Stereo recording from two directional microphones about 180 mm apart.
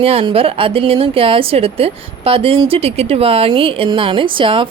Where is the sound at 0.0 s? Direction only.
30° right (ahead or behind).